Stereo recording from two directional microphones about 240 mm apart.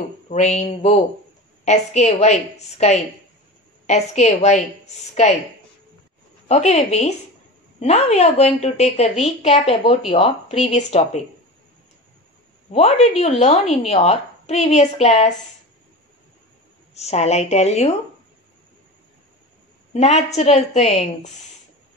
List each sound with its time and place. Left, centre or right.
0.3 s a woman's voice: left
6.5 s a woman's voice: left
12.7 s a woman's voice: left
16.9 s a woman's voice: left
19.9 s a woman's voice: left